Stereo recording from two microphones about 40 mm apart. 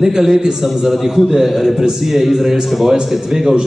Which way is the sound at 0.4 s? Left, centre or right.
Centre.